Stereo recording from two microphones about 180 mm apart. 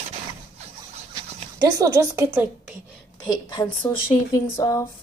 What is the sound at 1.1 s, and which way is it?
Pant, 25° right (ahead or behind).